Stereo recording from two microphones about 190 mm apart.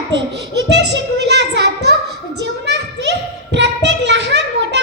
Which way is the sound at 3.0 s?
65° right (ahead or behind).